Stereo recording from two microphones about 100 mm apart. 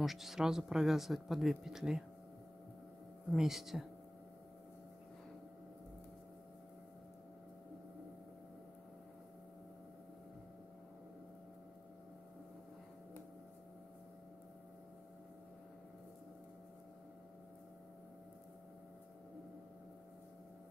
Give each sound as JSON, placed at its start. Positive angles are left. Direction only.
{"t": 0.0, "sound": "speech", "side_deg": 0}
{"t": 3.3, "sound": "speech", "side_deg": -5}